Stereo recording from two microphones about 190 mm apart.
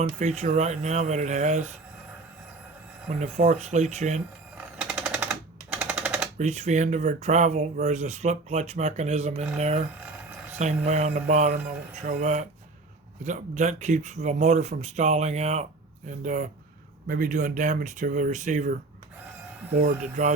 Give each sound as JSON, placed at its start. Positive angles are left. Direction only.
{"t": 0.0, "sound": "speech", "side_deg": -35}
{"t": 3.2, "sound": "speech", "side_deg": -35}
{"t": 4.5, "sound": "typewriter", "side_deg": -5}
{"t": 6.4, "sound": "speech", "side_deg": -35}
{"t": 19.8, "sound": "speech", "side_deg": -40}